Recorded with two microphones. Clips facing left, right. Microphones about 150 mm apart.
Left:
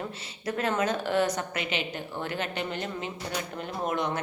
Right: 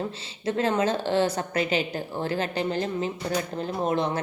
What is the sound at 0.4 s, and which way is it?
A woman's voice, 25° right (ahead or behind).